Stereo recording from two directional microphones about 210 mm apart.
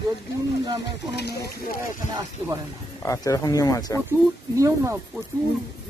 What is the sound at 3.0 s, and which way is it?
Speech, 15° left (ahead or behind).